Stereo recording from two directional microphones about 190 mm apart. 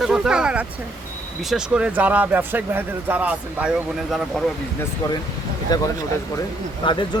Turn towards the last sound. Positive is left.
turn(degrees=25)  # may be behind; listen again after turning